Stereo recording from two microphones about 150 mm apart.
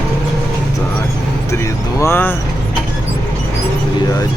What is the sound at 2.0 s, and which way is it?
Speech, 15° left (ahead or behind).